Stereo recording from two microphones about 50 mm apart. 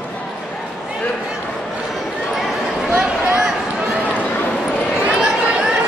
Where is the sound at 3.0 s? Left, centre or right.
Centre.